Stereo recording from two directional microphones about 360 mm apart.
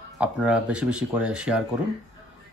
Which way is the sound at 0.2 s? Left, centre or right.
Centre.